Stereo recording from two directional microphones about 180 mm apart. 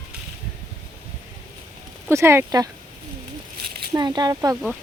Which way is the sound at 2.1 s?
15° right (ahead or behind).